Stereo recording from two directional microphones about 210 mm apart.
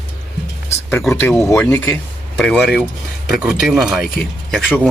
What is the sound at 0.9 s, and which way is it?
Speech, 5° left (ahead or behind).